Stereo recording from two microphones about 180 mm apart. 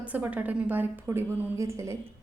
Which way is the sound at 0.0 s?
10° right (ahead or behind).